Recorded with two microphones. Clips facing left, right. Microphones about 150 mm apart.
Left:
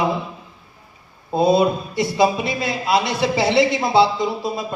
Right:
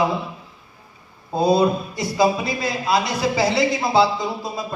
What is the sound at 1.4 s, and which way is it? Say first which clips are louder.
A man's voice: left 1 dB; 25° left (ahead or behind).